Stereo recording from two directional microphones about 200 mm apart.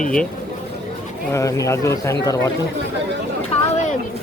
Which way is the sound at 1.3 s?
15° left (ahead or behind).